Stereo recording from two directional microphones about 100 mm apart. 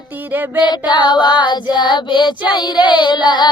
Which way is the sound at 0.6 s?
45° left (ahead or behind).